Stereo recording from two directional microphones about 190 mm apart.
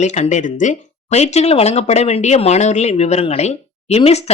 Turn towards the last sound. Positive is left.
turn(degrees=35)  # may be behind; listen again after turning